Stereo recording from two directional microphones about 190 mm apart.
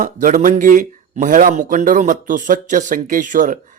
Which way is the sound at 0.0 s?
45° right (ahead or behind).